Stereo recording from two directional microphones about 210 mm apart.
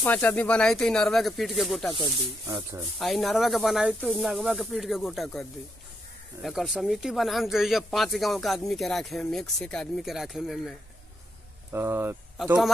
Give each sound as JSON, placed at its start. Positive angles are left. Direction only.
{"t": 0.0, "sound": "speech", "side_deg": 10}
{"t": 2.4, "sound": "speech", "side_deg": -20}
{"t": 3.0, "sound": "speech", "side_deg": 0}
{"t": 11.7, "sound": "speech", "side_deg": -10}
{"t": 12.4, "sound": "speech", "side_deg": 0}